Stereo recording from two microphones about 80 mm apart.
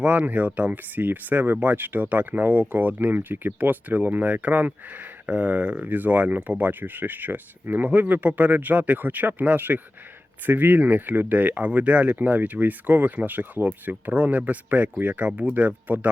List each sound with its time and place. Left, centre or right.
0.0 s speech: centre